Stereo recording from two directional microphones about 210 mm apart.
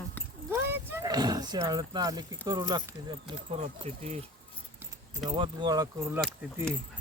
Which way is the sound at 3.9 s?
30° right (ahead or behind).